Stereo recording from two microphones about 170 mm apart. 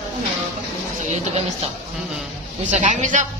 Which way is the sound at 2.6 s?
45° right (ahead or behind).